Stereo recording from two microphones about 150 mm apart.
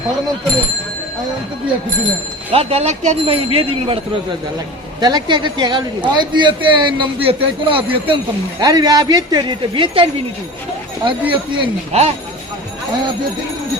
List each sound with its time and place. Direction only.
2.5 s a man's voice: 40° right (ahead or behind)
4.9 s a man's voice: 25° right (ahead or behind)
8.6 s a woman's voice: 25° right (ahead or behind)
11.9 s speech: 45° right (ahead or behind)